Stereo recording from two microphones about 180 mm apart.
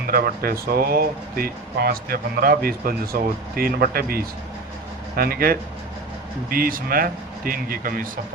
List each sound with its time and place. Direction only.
0.1 s speech: 55° right (ahead or behind)